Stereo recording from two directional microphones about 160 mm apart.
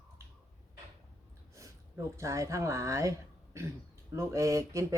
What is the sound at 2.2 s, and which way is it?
Speech, 20° right (ahead or behind).